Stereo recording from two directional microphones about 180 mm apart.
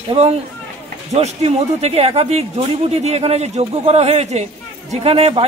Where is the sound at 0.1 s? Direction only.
35° right (ahead or behind).